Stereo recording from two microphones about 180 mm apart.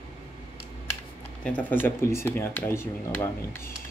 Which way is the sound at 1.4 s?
10° left (ahead or behind).